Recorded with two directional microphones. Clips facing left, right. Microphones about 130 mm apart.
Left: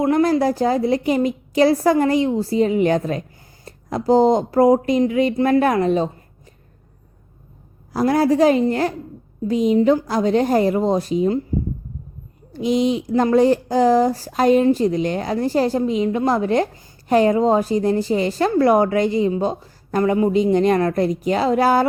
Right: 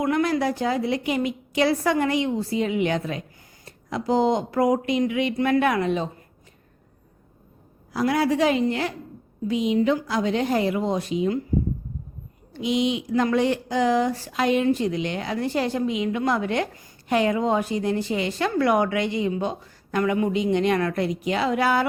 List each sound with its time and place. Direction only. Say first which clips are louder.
0.0 s speech: left 6 dB; 35° left (ahead or behind)
7.9 s speech: left 5 dB; 40° left (ahead or behind)
12.5 s speech: left 5 dB; 40° left (ahead or behind)